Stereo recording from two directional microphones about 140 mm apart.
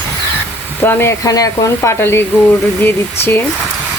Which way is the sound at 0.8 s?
15° left (ahead or behind).